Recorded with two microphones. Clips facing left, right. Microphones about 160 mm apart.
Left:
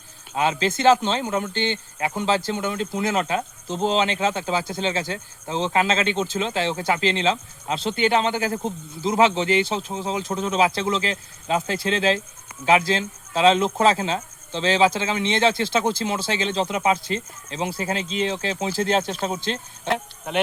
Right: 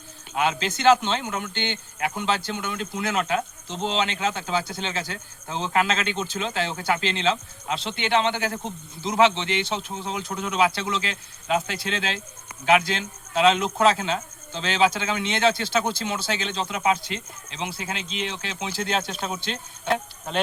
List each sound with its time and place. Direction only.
0.3 s speech: 35° left (ahead or behind)